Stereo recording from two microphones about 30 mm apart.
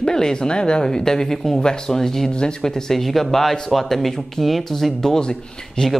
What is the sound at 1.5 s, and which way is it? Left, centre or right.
Speech, left.